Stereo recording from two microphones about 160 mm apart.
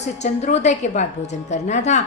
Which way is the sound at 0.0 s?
45° left (ahead or behind).